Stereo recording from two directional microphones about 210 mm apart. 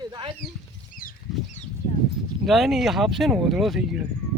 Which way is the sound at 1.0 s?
40° left (ahead or behind).